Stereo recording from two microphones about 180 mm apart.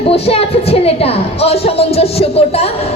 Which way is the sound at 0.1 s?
35° left (ahead or behind).